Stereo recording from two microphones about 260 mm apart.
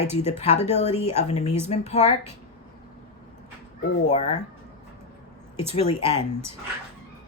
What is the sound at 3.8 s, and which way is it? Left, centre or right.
Speech, left.